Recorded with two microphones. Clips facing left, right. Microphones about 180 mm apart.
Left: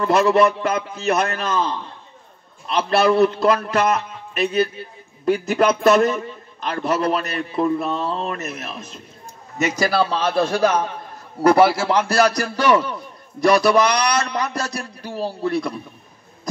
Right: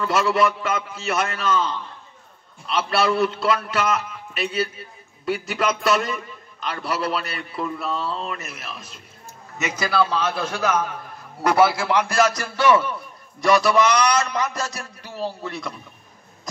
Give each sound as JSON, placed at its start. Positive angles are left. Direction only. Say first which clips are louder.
{"t": 0.0, "sound": "a man's voice", "louder": "left 5 dB", "side_deg": 40}